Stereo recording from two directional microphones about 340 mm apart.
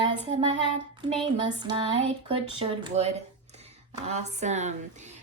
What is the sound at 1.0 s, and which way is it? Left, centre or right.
Speech, centre.